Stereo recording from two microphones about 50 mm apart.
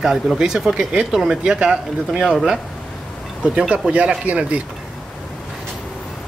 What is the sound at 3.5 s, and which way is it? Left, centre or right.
Speech, centre.